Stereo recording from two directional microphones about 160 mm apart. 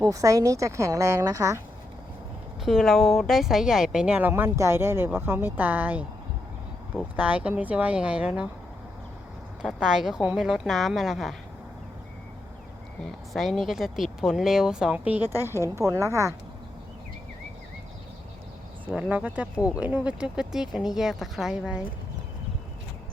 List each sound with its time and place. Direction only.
0.0 s speech: 20° right (ahead or behind)
2.6 s speech: centre (ahead or behind)
7.2 s speech: 10° right (ahead or behind)
9.6 s speech: 5° right (ahead or behind)
13.3 s speech: centre (ahead or behind); by 16.3 s 20° right (ahead or behind)
18.9 s speech: 5° right (ahead or behind)